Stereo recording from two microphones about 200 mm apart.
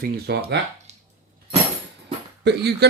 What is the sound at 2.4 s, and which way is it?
Speech, 55° right (ahead or behind).